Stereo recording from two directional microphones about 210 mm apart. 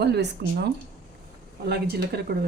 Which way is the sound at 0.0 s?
50° right (ahead or behind).